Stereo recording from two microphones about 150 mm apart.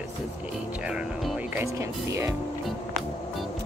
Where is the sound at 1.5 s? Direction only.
20° right (ahead or behind).